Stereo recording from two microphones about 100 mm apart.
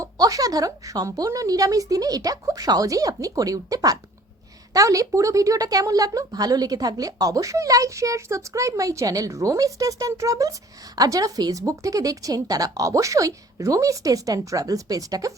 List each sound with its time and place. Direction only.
0.0 s a woman's voice: 35° right (ahead or behind)